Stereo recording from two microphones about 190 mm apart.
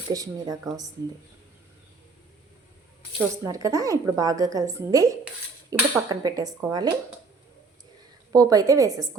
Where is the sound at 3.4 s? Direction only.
15° right (ahead or behind).